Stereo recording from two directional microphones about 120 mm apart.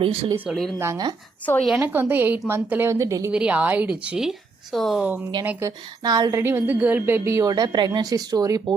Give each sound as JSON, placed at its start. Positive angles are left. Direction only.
{"t": 0.0, "sound": "speech", "side_deg": -50}
{"t": 0.5, "sound": "speech", "side_deg": 0}
{"t": 1.8, "sound": "a woman's voice", "side_deg": -15}
{"t": 3.3, "sound": "a woman's voice", "side_deg": -10}
{"t": 5.0, "sound": "a woman's voice", "side_deg": -15}
{"t": 6.0, "sound": "speech", "side_deg": -35}
{"t": 6.4, "sound": "a woman's voice", "side_deg": -15}